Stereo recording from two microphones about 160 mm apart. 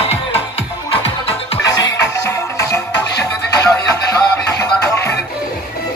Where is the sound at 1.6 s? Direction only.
25° left (ahead or behind).